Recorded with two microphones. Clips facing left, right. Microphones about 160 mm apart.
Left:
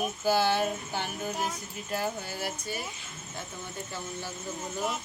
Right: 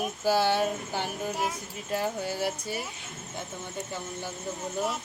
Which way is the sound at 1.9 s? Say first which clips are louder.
Right 3 dB; 25° right (ahead or behind).